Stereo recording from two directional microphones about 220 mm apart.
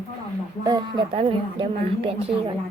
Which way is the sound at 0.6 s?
20° right (ahead or behind).